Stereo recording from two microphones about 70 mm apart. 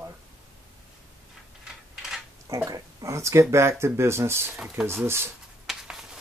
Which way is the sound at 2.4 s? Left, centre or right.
Right.